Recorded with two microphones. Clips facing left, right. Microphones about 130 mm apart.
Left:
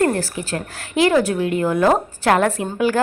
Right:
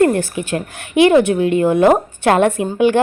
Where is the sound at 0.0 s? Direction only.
20° right (ahead or behind).